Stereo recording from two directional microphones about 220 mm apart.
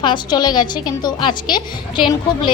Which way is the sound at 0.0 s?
20° left (ahead or behind).